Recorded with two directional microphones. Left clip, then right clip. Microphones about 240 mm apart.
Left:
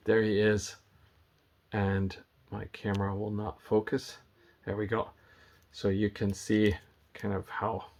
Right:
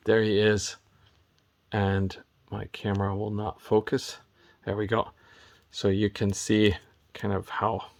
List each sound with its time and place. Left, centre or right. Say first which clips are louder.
0.0 s speech: right 4 dB; right